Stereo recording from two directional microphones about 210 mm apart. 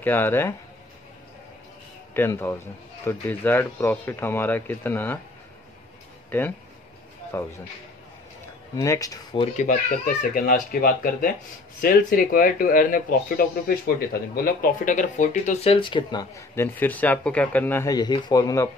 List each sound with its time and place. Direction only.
0.0 s speech: 10° left (ahead or behind)
2.1 s speech: 10° left (ahead or behind)
7.3 s speech: 10° left (ahead or behind)
8.7 s speech: 15° left (ahead or behind)
9.6 s speech: 40° left (ahead or behind); by 18.7 s 15° left (ahead or behind)